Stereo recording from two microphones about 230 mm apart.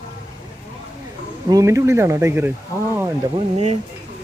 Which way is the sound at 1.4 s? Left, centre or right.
Centre.